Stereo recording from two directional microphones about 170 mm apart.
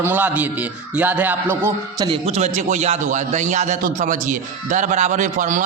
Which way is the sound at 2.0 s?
35° right (ahead or behind).